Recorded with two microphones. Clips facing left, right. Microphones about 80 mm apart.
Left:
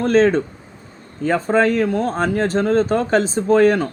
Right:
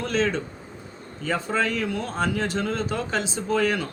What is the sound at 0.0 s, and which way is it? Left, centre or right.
Speech, left.